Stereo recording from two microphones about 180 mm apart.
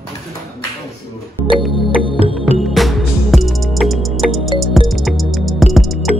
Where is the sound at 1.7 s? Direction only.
30° left (ahead or behind).